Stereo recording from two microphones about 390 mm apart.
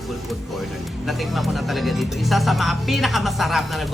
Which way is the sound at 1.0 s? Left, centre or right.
Centre.